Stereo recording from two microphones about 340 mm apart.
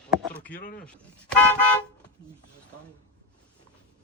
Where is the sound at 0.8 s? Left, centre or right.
Centre.